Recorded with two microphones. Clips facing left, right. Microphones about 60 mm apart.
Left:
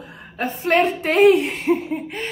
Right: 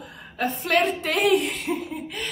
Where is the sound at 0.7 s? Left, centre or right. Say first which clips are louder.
Left 5 dB; left.